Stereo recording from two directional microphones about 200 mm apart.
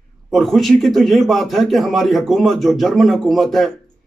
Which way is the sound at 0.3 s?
Centre (ahead or behind).